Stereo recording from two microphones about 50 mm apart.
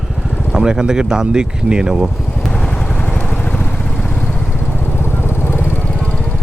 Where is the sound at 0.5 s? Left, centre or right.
Centre.